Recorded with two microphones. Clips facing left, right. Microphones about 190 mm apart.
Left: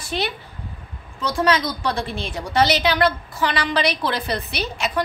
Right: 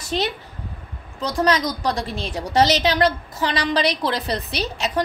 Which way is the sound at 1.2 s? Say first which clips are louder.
Even; 35° right (ahead or behind).